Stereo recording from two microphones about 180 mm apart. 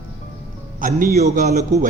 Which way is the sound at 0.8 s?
55° right (ahead or behind).